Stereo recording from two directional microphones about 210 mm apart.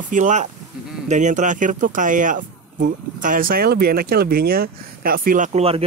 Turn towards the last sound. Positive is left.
turn(degrees=-30)  # may be behind; listen again after turning